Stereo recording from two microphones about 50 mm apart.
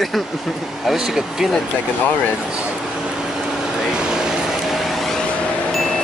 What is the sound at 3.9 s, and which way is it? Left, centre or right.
Vehicle, centre.